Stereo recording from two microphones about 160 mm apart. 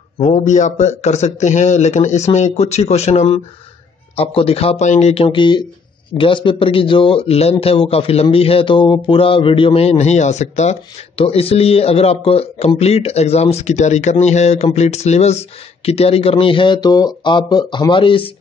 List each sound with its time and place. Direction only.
0.2 s a man's voice: 45° left (ahead or behind)